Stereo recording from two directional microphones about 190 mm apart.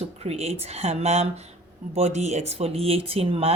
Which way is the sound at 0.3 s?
35° right (ahead or behind).